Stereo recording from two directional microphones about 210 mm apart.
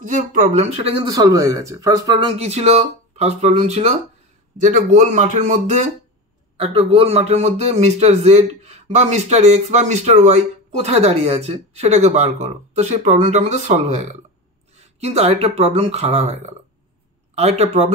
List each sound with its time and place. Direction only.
0.0 s speech: 40° right (ahead or behind)
6.5 s speech: 25° right (ahead or behind)